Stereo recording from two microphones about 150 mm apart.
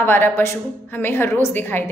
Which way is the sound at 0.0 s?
15° left (ahead or behind).